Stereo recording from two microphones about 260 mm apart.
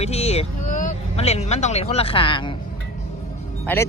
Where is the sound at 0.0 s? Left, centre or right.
Left.